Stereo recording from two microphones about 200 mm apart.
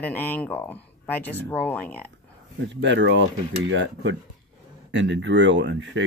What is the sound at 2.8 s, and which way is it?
Speech, 65° right (ahead or behind).